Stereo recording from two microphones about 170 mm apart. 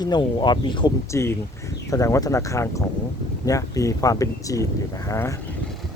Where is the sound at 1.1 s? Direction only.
15° left (ahead or behind).